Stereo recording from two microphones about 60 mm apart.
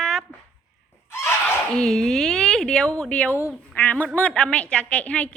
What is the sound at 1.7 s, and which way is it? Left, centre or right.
A woman's voice, centre.